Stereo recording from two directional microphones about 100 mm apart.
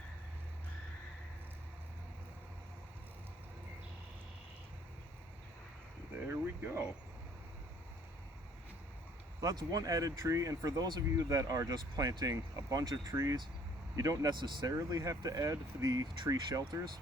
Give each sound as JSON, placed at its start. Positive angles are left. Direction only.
{"t": 6.1, "sound": "a sound", "side_deg": -20}
{"t": 9.4, "sound": "speech", "side_deg": -40}
{"t": 14.3, "sound": "speech", "side_deg": -50}
{"t": 14.7, "sound": "speech", "side_deg": -35}